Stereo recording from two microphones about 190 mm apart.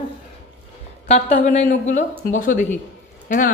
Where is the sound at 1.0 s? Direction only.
35° left (ahead or behind).